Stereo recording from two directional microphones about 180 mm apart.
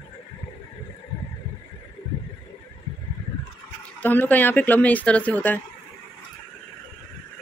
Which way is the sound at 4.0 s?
10° left (ahead or behind).